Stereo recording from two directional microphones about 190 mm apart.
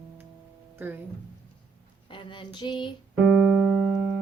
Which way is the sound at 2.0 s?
25° left (ahead or behind).